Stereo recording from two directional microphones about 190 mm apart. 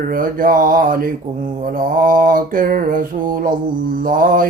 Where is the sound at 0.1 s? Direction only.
45° right (ahead or behind).